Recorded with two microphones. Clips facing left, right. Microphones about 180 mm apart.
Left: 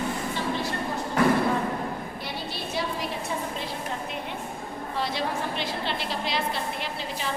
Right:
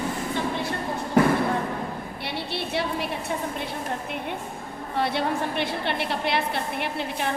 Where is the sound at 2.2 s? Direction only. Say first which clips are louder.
Right 3 dB; 65° right (ahead or behind).